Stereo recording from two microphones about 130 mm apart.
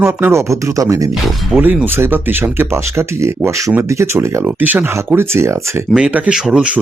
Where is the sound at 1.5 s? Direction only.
15° right (ahead or behind).